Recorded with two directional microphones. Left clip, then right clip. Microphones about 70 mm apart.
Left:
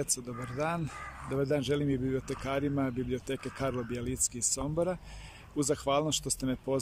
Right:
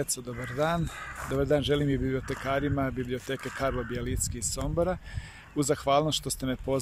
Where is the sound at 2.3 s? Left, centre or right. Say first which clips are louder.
Right 4 dB; left.